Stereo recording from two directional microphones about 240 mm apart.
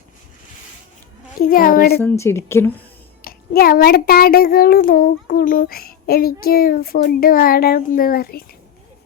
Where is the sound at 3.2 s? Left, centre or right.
Left.